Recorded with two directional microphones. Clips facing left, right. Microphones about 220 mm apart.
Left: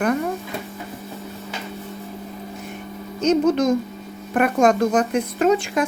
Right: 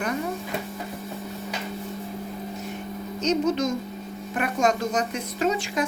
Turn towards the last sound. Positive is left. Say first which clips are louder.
# left 6 dB
turn(degrees=55)  # may be behind; listen again after turning